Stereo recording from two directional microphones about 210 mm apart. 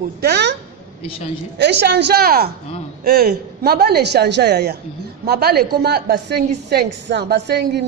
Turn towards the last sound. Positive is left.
turn(degrees=-55)  # may be behind; listen again after turning